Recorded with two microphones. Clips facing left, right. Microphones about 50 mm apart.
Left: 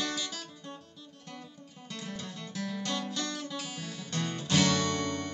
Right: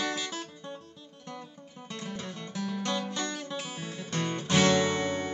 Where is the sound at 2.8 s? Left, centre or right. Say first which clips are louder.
Right 3 dB; right.